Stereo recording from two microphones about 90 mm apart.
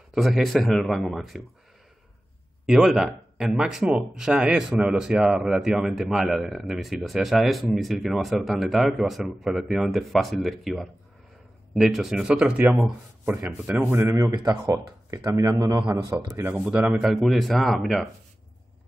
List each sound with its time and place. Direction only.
0.1 s speech: centre (ahead or behind)
2.6 s speech: 5° right (ahead or behind); by 14.0 s 20° right (ahead or behind)
14.0 s speech: 35° right (ahead or behind)
14.3 s speech: 55° right (ahead or behind)
14.7 s speech: 35° right (ahead or behind)
16.6 s speech: 15° right (ahead or behind)
17.0 s speech: centre (ahead or behind)